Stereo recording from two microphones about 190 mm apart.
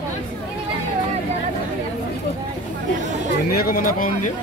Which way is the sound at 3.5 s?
50° left (ahead or behind).